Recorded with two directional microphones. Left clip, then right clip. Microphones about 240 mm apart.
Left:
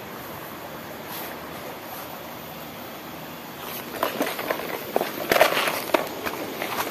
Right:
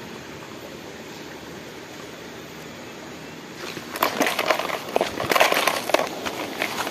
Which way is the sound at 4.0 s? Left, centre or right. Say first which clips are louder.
Right 5 dB; right.